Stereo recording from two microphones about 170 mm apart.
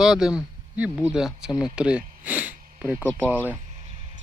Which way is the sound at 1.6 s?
5° right (ahead or behind).